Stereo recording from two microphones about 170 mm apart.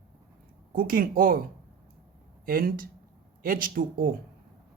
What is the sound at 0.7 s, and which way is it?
Speech, 55° right (ahead or behind).